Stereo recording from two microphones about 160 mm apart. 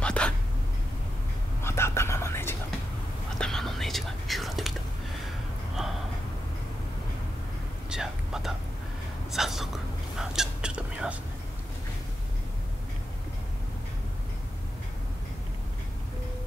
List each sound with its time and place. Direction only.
0.0 s a sound: 5° left (ahead or behind)
1.6 s whispering: 15° left (ahead or behind)
3.3 s whispering: 5° left (ahead or behind)
5.8 s gasp: 5° right (ahead or behind)
7.9 s whispering: 5° right (ahead or behind)